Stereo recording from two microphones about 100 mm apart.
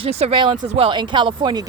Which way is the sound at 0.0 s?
80° right.